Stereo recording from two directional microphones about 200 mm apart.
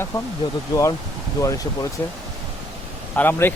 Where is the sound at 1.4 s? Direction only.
15° left (ahead or behind).